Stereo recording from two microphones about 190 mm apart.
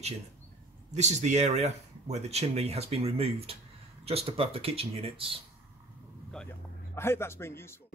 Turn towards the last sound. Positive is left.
turn(degrees=15)  # may be behind; listen again after turning